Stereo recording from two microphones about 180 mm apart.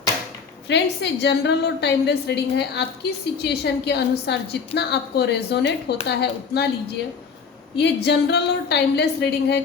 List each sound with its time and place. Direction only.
0.7 s a woman's voice: 70° left (ahead or behind)
7.8 s a woman's voice: 70° left (ahead or behind)